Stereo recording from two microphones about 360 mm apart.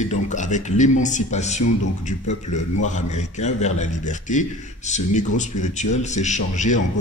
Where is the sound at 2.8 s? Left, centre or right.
Centre.